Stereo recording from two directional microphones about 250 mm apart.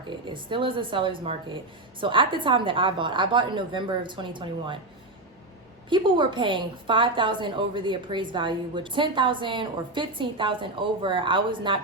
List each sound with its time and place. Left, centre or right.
0.3 s a woman's voice: centre
5.9 s a woman's voice: centre